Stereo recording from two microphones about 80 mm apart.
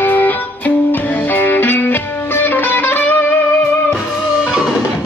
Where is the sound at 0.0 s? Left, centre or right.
Left.